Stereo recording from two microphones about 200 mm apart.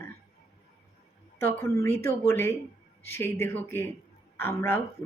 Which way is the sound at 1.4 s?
15° left (ahead or behind).